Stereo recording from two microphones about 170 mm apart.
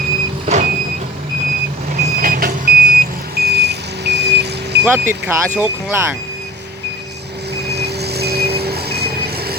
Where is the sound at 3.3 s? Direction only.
75° right (ahead or behind).